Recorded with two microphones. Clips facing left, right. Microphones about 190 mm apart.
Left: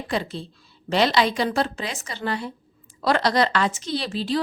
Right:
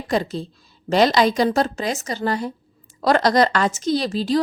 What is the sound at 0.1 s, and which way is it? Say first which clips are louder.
A woman's voice: right 6 dB; 40° right (ahead or behind).